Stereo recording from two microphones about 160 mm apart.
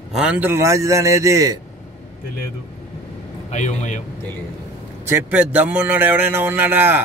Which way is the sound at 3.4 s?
50° left (ahead or behind).